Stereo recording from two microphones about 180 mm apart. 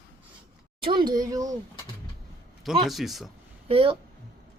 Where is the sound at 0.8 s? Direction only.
25° right (ahead or behind).